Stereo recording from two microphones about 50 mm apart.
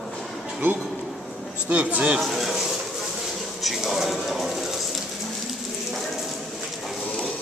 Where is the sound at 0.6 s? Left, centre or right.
Right.